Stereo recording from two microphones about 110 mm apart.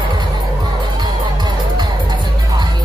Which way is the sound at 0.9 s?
40° right (ahead or behind).